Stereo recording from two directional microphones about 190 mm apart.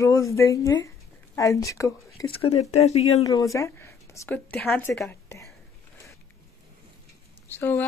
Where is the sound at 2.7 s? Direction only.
35° left (ahead or behind).